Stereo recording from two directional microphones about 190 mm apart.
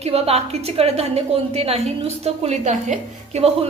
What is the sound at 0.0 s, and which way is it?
A woman's voice, 30° right (ahead or behind).